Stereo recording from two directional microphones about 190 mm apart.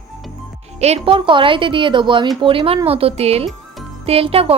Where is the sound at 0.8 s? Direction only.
30° right (ahead or behind).